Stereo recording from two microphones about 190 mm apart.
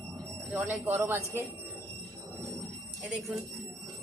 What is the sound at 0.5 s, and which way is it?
Speech, 10° right (ahead or behind).